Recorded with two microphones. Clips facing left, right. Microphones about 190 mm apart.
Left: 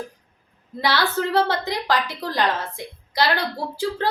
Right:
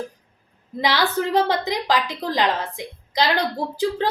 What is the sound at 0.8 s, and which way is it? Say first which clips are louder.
A woman's voice: right 1 dB; 15° right (ahead or behind).